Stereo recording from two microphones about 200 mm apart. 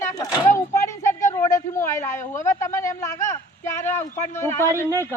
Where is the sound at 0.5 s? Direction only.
15° left (ahead or behind).